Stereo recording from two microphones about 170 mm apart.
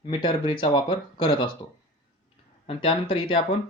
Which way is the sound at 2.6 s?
30° left (ahead or behind).